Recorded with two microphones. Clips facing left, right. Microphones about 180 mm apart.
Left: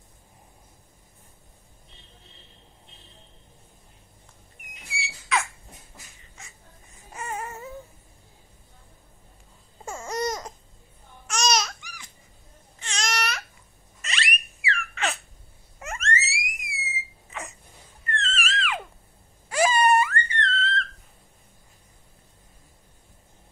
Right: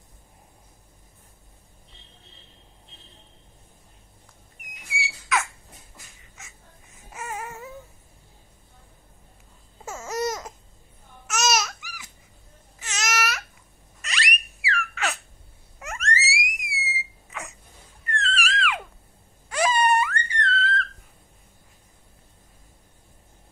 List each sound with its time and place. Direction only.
7.1 s babbling: centre (ahead or behind)
9.8 s babbling: 5° right (ahead or behind)
12.7 s baby cry: 5° right (ahead or behind)
14.0 s a sound: centre (ahead or behind)